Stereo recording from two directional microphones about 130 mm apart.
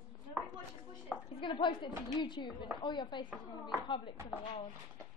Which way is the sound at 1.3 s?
40° left (ahead or behind).